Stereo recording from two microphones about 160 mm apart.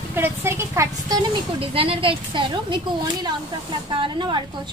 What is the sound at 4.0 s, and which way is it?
Speech, 30° right (ahead or behind).